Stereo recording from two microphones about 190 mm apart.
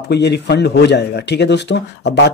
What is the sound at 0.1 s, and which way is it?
Speech, 60° left (ahead or behind).